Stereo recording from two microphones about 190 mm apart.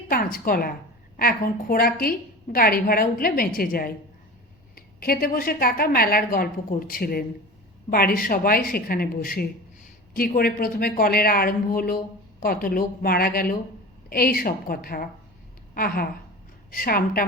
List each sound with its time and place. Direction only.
0.1 s a woman's voice: 50° left (ahead or behind)